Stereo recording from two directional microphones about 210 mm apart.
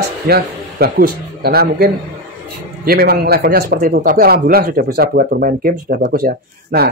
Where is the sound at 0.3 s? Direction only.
45° right (ahead or behind).